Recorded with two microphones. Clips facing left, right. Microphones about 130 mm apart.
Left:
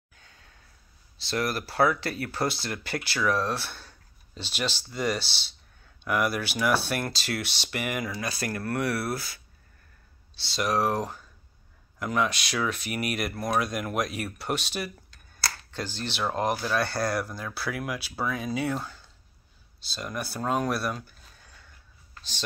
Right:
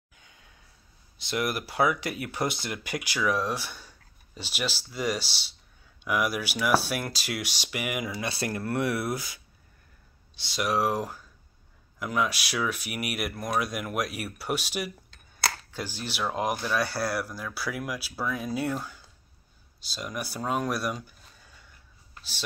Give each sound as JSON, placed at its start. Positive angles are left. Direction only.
{"t": 0.1, "sound": "sigh", "side_deg": -15}
{"t": 1.2, "sound": "speech", "side_deg": -15}
{"t": 8.2, "sound": "speech", "side_deg": -25}